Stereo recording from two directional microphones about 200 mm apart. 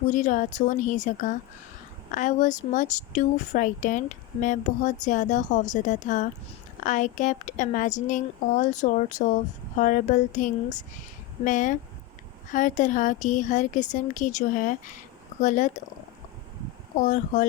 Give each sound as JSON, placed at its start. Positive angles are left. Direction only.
{"t": 0.1, "sound": "speech", "side_deg": 40}
{"t": 17.0, "sound": "speech", "side_deg": 40}